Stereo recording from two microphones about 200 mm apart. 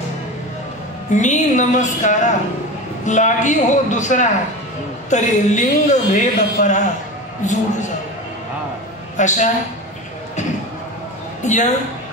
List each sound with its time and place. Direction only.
1.1 s a man's voice: 35° left (ahead or behind)
9.1 s a man's voice: 35° left (ahead or behind)
11.4 s a man's voice: 35° left (ahead or behind)